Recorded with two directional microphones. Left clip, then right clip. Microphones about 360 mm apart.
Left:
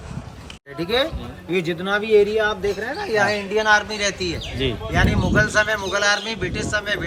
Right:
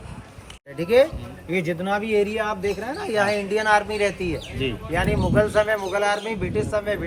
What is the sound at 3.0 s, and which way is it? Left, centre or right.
Speech, right.